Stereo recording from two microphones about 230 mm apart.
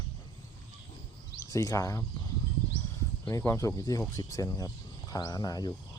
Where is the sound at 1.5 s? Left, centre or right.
Centre.